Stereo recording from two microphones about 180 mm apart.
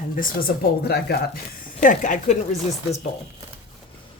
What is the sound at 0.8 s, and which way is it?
Speech, 60° left (ahead or behind).